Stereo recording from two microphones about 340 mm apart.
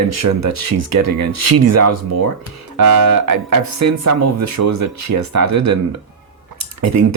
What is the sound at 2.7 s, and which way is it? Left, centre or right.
Speech, right.